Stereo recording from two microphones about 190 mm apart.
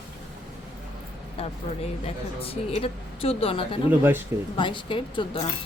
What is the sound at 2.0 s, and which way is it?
Speech, 30° left (ahead or behind).